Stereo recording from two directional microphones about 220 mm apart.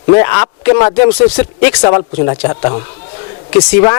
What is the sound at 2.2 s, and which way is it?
Speech, 25° left (ahead or behind).